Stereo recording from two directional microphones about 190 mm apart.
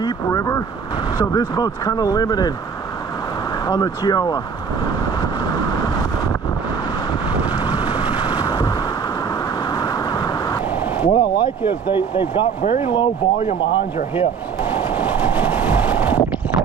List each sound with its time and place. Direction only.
0.0 s vehicle: 20° left (ahead or behind)
1.2 s speech: 20° left (ahead or behind)
3.7 s speech: 20° left (ahead or behind)
8.2 s vehicle: 20° left (ahead or behind)
9.7 s vehicle: 20° left (ahead or behind)
11.0 s speech: 25° left (ahead or behind)
14.6 s vehicle: 10° right (ahead or behind)